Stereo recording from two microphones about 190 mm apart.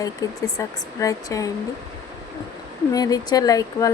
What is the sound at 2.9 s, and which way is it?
Speech, 20° left (ahead or behind).